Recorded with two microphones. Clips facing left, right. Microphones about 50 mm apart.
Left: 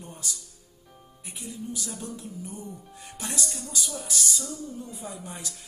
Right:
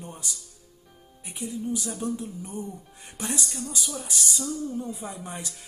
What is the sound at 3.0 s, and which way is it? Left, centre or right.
Speech, right.